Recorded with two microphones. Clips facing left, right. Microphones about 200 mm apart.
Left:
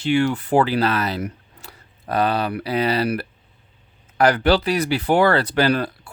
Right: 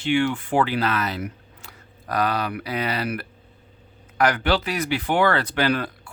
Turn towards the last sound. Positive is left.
turn(degrees=35)  # may be behind; listen again after turning